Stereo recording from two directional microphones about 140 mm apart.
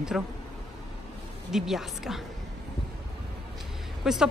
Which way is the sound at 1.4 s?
Centre (ahead or behind).